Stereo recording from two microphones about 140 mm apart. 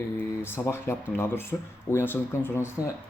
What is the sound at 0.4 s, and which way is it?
Speech, 15° left (ahead or behind).